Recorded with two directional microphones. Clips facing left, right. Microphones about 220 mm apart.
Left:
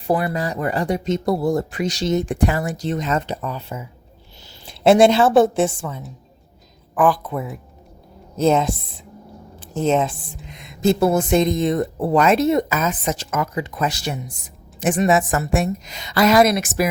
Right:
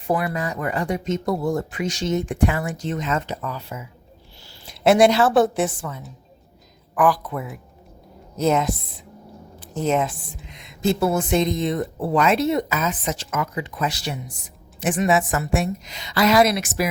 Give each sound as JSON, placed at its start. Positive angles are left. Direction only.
{"t": 0.1, "sound": "a woman's voice", "side_deg": 30}
{"t": 10.5, "sound": "speech", "side_deg": 50}